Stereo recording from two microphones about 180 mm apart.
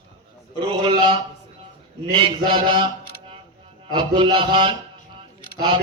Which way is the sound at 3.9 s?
25° right (ahead or behind).